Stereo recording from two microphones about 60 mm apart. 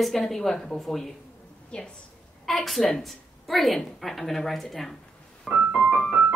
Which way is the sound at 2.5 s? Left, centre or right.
Centre.